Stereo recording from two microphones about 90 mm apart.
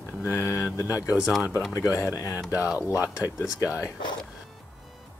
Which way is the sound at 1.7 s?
35° left (ahead or behind).